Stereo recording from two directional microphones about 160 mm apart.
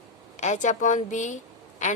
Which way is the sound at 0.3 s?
50° left (ahead or behind).